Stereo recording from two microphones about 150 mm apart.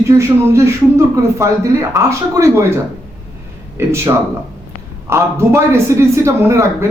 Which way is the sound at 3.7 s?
15° right (ahead or behind).